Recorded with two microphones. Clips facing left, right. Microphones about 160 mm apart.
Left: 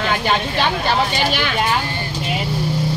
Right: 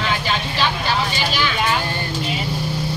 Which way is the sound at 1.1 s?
60° left (ahead or behind).